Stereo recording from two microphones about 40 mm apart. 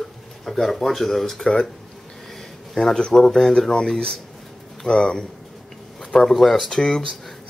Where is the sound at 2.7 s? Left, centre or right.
Centre.